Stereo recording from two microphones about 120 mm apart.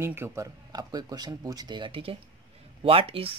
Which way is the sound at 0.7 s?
35° right (ahead or behind).